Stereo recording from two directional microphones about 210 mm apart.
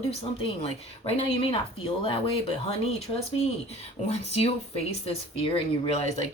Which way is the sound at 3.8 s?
30° left (ahead or behind).